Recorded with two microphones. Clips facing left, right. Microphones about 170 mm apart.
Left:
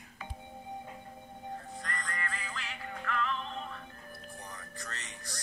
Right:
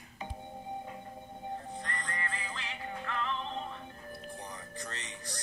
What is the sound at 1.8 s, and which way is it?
Music, 30° right (ahead or behind).